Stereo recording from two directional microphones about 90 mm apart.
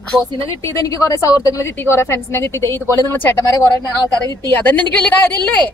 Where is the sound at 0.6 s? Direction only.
40° left (ahead or behind).